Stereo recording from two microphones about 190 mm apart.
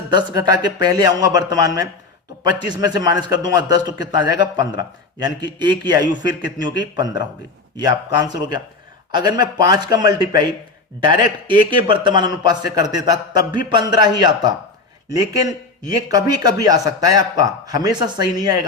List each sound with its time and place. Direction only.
0.1 s a man's voice: 25° right (ahead or behind)